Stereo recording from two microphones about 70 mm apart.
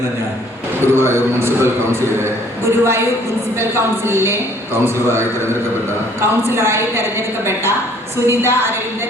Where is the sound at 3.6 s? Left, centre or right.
Right.